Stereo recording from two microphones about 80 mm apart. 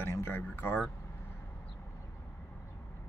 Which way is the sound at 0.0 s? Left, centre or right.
Left.